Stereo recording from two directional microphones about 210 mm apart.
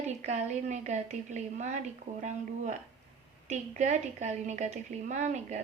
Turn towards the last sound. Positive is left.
turn(degrees=-35)  # may be behind; listen again after turning